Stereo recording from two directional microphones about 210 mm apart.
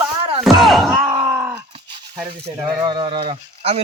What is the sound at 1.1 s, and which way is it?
Groan, 15° right (ahead or behind).